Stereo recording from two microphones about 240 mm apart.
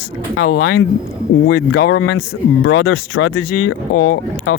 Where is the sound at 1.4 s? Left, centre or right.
Left.